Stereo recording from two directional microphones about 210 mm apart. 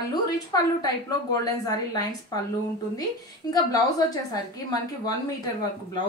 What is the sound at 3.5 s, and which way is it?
Speech, 15° left (ahead or behind).